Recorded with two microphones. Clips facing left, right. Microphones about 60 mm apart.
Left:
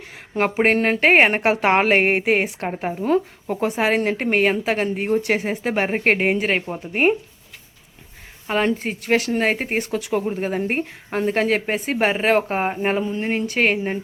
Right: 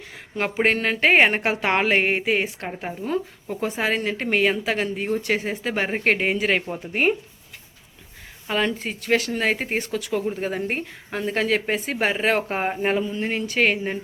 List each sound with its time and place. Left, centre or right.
0.5 s speech: left
2.6 s a woman's voice: left
3.0 s a woman's voice: left
8.4 s a woman's voice: left
11.6 s a woman's voice: centre
13.0 s a woman's voice: left